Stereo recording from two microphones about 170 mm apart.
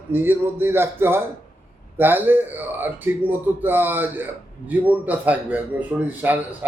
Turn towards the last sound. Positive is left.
turn(degrees=-10)  # may be behind; listen again after turning